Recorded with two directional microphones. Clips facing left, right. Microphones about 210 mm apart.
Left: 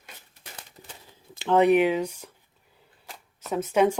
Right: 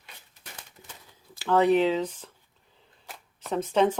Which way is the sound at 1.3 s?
20° left (ahead or behind).